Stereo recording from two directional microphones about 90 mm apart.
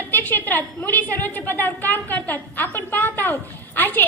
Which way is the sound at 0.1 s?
20° left (ahead or behind).